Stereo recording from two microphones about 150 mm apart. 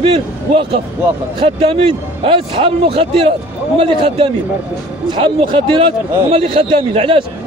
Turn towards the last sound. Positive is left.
turn(degrees=-35)  # may be behind; listen again after turning